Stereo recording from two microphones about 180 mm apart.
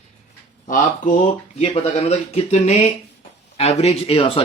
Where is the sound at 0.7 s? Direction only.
45° left (ahead or behind).